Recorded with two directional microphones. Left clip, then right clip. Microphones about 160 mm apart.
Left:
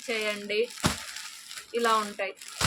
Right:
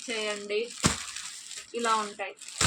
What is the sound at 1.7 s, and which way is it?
Speech, 50° left (ahead or behind).